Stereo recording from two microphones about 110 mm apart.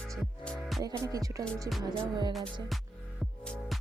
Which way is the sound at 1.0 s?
30° right (ahead or behind).